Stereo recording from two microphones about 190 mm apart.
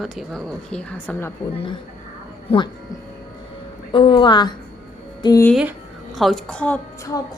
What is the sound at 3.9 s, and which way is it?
A woman's voice, 25° left (ahead or behind).